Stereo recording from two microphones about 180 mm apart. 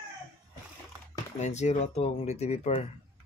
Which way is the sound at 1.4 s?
40° left (ahead or behind).